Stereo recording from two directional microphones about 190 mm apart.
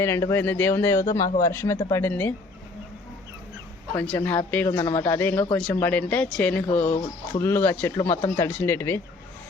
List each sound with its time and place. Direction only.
0.0 s speech: 15° left (ahead or behind)
3.9 s speech: 5° left (ahead or behind)